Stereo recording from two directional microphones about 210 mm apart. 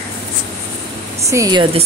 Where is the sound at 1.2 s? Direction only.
15° right (ahead or behind).